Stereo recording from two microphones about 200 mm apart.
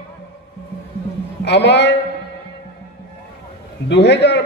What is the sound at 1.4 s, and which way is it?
Speech, 60° left (ahead or behind).